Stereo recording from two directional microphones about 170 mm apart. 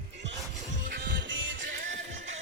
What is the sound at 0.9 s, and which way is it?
Music, 90° right.